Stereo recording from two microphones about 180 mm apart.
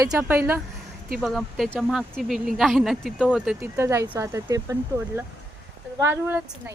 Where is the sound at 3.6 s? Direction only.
15° right (ahead or behind).